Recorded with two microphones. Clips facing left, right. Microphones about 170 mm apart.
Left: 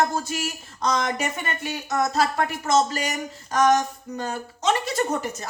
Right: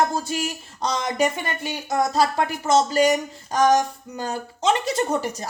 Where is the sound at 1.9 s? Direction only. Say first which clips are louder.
Right 2 dB; 30° right (ahead or behind).